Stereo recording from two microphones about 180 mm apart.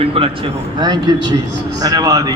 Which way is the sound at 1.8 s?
20° right (ahead or behind).